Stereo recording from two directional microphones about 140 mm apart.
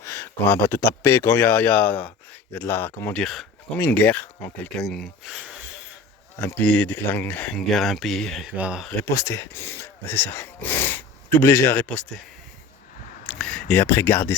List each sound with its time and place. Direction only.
0.0 s speech: 15° left (ahead or behind)
4.8 s speech: 5° left (ahead or behind)
6.3 s speech: 15° left (ahead or behind); by 8.9 s 5° right (ahead or behind)
9.0 s speech: 20° left (ahead or behind)
13.4 s speech: 10° left (ahead or behind)